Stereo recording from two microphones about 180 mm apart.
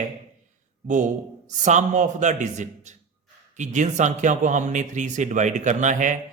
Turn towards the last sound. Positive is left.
turn(degrees=-45)  # may be behind; listen again after turning